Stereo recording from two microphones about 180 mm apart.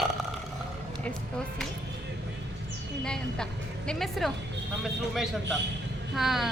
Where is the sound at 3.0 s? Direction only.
5° left (ahead or behind).